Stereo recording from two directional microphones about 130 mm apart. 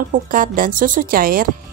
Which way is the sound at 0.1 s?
90° right.